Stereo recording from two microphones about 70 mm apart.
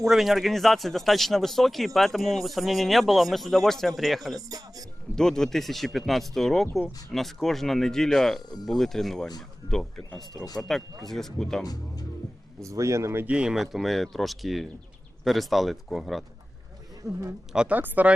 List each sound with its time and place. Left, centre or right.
0.1 s speech: centre
4.4 s speech: right
5.1 s speech: centre
10.6 s speech: centre
11.6 s speech: left
12.6 s speech: right
13.2 s speech: centre
13.6 s speech: centre
17.0 s speech: right
17.7 s speech: right